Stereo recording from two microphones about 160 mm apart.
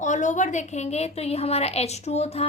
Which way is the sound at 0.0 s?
50° left (ahead or behind).